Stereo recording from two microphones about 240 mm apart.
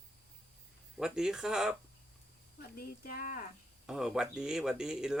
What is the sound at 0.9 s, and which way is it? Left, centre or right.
Speech, centre.